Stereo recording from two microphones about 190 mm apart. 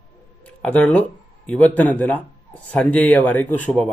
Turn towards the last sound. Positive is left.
turn(degrees=5)  # may be behind; listen again after turning